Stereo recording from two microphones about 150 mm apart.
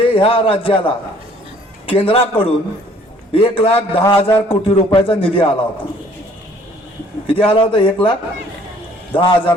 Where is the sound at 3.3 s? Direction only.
40° left (ahead or behind).